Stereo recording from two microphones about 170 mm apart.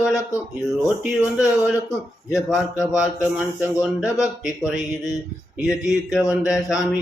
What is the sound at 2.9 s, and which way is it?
Music, 5° right (ahead or behind).